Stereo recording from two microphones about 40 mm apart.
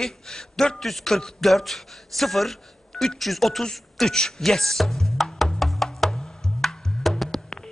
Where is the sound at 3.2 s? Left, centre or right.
Centre.